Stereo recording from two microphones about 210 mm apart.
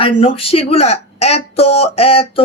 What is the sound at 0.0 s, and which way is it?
Speech, 25° left (ahead or behind).